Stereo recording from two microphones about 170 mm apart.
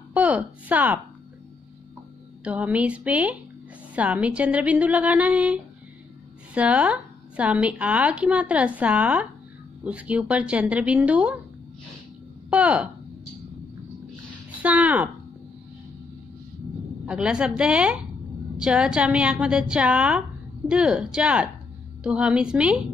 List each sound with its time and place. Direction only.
0.1 s a woman's voice: 10° right (ahead or behind)
2.4 s a woman's voice: 10° right (ahead or behind)
12.4 s speech: 5° right (ahead or behind)
14.6 s a woman's voice: 10° right (ahead or behind)
17.0 s a woman's voice: 5° right (ahead or behind)